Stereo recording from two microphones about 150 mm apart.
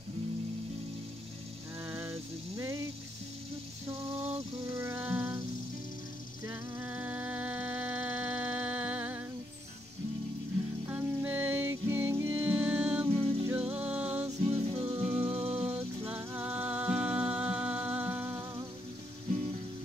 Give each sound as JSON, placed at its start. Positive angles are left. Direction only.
{"t": 1.9, "sound": "a sound", "side_deg": -20}
{"t": 4.7, "sound": "music", "side_deg": -15}
{"t": 6.4, "sound": "music", "side_deg": -15}
{"t": 10.9, "sound": "music", "side_deg": -10}
{"t": 13.1, "sound": "music", "side_deg": -40}
{"t": 13.5, "sound": "music", "side_deg": -10}
{"t": 14.4, "sound": "music", "side_deg": -40}
{"t": 14.9, "sound": "music", "side_deg": -15}
{"t": 15.2, "sound": "music", "side_deg": -40}
{"t": 15.7, "sound": "music", "side_deg": -15}